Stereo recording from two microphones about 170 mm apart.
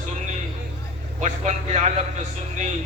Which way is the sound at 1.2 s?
45° right (ahead or behind).